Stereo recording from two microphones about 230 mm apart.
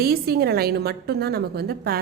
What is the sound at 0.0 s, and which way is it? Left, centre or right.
A woman's voice, right.